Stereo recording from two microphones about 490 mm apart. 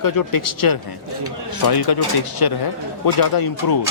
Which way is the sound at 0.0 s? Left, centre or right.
Left.